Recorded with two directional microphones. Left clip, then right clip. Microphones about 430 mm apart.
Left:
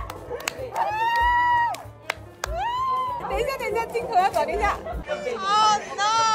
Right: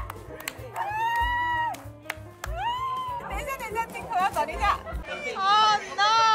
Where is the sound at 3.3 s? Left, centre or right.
Centre.